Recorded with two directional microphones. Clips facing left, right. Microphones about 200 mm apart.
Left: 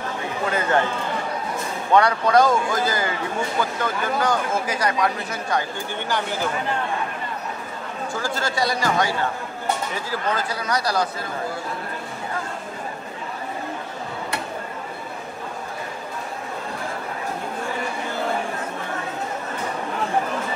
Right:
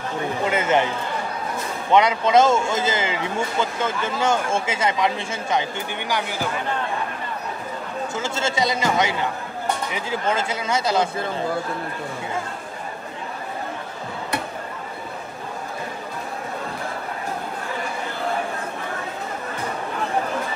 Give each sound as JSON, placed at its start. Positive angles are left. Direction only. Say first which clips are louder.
{"t": 0.5, "sound": "speech", "louder": "right 1 dB", "side_deg": -20}
{"t": 1.9, "sound": "a man's voice", "louder": "even", "side_deg": -20}
{"t": 8.1, "sound": "a man's voice", "louder": "even", "side_deg": -25}